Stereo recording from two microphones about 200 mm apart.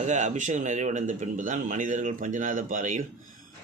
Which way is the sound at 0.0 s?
40° right (ahead or behind).